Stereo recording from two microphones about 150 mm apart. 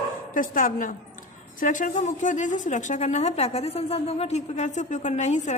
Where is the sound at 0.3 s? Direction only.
65° left (ahead or behind).